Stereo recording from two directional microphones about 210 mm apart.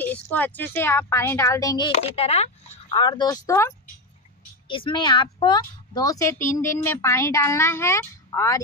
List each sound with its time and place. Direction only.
0.0 s a woman's voice: 10° left (ahead or behind)
1.9 s a woman's voice: 30° left (ahead or behind); by 8.5 s 15° left (ahead or behind)